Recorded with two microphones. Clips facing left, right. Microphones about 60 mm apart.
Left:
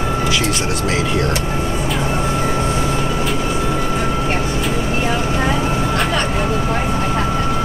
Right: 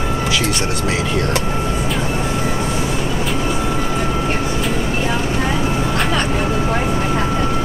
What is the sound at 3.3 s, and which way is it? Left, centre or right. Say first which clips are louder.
Vehicle: even; centre.